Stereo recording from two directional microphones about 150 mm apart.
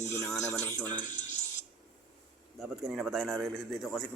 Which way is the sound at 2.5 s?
Centre (ahead or behind).